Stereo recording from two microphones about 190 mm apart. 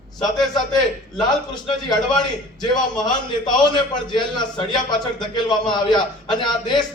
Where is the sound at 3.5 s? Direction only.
25° left (ahead or behind).